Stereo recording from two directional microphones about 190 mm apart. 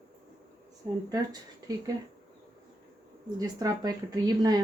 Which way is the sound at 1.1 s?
20° right (ahead or behind).